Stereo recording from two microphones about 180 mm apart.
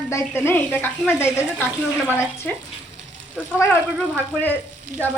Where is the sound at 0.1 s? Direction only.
15° left (ahead or behind).